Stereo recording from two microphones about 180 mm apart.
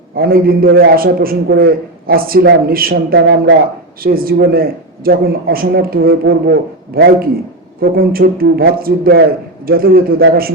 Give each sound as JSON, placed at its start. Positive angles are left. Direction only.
{"t": 0.2, "sound": "speech", "side_deg": -55}
{"t": 3.2, "sound": "speech", "side_deg": -85}
{"t": 4.0, "sound": "speech", "side_deg": -55}